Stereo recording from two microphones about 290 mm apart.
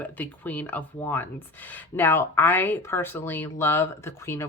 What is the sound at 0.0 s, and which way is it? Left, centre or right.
A woman's voice, centre.